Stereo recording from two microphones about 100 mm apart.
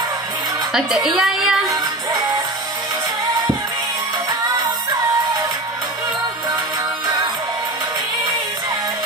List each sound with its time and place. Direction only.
0.7 s a woman's voice: 5° right (ahead or behind)